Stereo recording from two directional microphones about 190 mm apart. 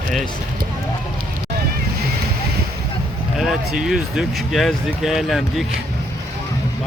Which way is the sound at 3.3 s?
Centre (ahead or behind).